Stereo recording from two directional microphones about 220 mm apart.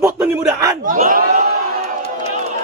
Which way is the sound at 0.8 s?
40° right (ahead or behind).